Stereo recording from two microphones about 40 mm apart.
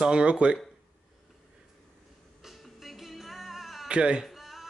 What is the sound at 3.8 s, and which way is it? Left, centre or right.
Speech, right.